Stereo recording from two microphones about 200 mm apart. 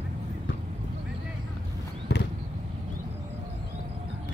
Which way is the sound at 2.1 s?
60° left (ahead or behind).